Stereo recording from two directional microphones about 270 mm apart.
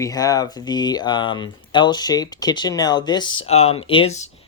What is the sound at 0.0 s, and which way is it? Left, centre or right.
Speech, centre.